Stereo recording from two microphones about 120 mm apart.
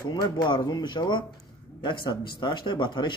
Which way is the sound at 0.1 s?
40° left (ahead or behind).